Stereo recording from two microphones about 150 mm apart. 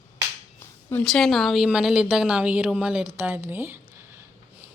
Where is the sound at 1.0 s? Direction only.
5° left (ahead or behind); by 3.8 s 15° right (ahead or behind).